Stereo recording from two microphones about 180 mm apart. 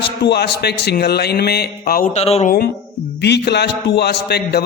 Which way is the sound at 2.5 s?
60° left (ahead or behind).